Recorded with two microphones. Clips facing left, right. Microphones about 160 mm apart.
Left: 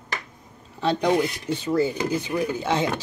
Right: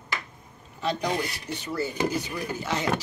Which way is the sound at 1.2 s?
20° left (ahead or behind).